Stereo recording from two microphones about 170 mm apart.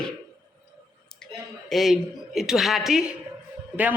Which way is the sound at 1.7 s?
Centre (ahead or behind).